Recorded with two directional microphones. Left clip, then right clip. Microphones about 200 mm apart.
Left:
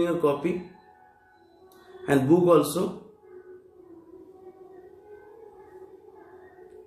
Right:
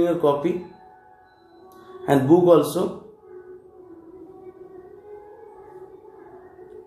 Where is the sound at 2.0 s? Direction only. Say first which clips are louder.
Right 5 dB; 10° left (ahead or behind).